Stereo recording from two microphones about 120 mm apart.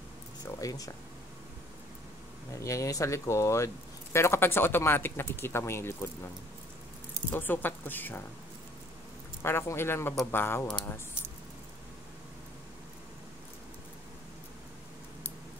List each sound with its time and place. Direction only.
0.5 s speech: 30° left (ahead or behind)
2.5 s speech: 25° left (ahead or behind)
9.4 s speech: 20° left (ahead or behind)